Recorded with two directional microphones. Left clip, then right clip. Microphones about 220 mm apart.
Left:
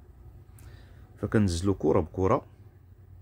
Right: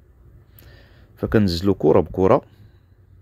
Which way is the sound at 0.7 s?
20° right (ahead or behind).